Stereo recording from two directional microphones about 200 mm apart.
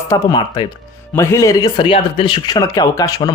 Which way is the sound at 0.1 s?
20° left (ahead or behind).